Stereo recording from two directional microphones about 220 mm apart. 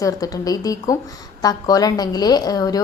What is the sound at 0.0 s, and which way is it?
A woman's voice, 15° left (ahead or behind).